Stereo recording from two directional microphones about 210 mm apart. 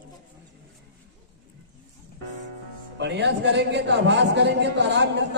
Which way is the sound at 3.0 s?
55° right (ahead or behind).